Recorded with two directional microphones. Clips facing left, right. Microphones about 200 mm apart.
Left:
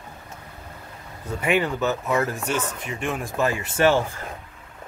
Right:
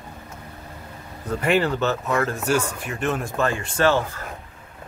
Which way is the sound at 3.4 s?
15° left (ahead or behind).